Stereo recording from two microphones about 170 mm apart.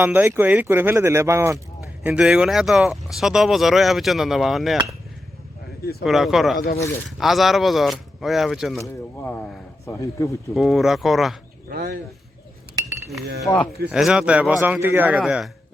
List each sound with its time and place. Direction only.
0.0 s speech: 10° right (ahead or behind)
2.0 s speech: 5° right (ahead or behind)
6.0 s speech: centre (ahead or behind)
8.8 s speech: 10° left (ahead or behind)
10.5 s speech: centre (ahead or behind)
11.7 s speech: 60° right (ahead or behind)
13.4 s speech: 5° left (ahead or behind)